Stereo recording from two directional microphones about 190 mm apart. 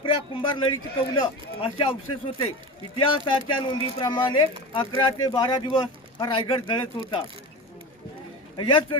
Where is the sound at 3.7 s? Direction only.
25° left (ahead or behind).